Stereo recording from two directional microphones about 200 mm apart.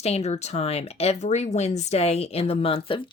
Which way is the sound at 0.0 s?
30° left (ahead or behind).